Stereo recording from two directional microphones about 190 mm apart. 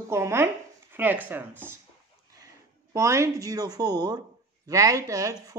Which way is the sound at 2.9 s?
15° right (ahead or behind).